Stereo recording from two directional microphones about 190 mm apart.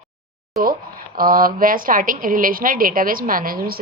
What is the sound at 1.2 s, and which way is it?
A woman's voice, 50° right (ahead or behind).